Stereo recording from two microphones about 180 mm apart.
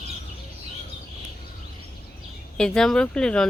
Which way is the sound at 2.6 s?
5° left (ahead or behind).